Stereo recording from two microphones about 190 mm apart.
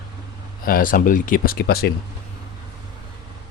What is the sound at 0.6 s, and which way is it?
Speech, 50° left (ahead or behind).